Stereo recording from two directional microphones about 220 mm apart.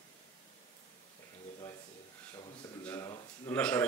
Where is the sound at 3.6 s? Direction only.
5° left (ahead or behind).